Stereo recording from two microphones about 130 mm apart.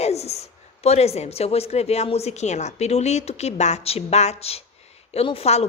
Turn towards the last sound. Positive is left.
turn(degrees=50)  # may be behind; listen again after turning